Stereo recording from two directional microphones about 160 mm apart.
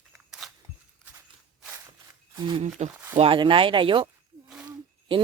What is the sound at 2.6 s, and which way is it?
Speech, 45° right (ahead or behind).